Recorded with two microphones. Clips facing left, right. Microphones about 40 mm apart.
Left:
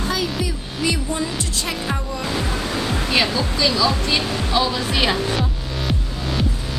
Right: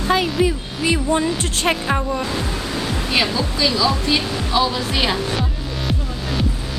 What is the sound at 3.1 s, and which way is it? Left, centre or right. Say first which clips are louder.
Music: right 1 dB; centre.